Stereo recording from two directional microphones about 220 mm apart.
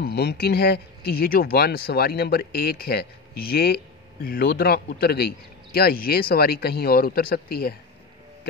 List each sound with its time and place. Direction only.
0.0 s speech: 50° left (ahead or behind)